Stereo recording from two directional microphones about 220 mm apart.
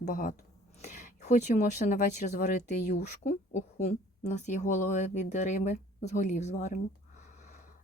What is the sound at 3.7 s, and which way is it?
Speech, 30° left (ahead or behind).